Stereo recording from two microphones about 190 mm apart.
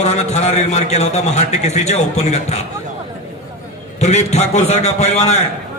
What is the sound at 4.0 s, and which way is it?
A man's voice, 35° left (ahead or behind).